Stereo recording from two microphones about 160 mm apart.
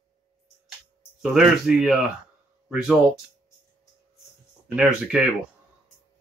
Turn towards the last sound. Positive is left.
turn(degrees=-5)  # may be behind; listen again after turning